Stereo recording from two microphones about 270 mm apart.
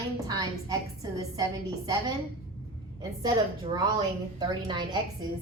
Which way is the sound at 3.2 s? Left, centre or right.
Centre.